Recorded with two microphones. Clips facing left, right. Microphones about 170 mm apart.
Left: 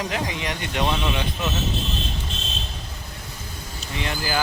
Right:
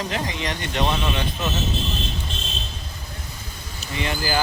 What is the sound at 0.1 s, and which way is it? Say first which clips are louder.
Speech: even; 10° left (ahead or behind).